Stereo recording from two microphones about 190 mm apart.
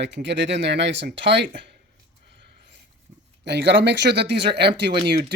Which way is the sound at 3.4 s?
65° right (ahead or behind).